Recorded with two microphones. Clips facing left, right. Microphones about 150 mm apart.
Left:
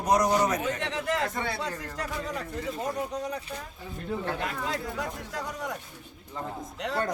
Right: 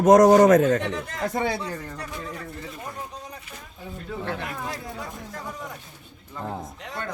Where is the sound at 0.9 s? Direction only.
90° left.